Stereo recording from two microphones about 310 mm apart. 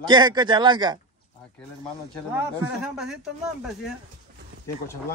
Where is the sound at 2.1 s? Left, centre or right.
Centre.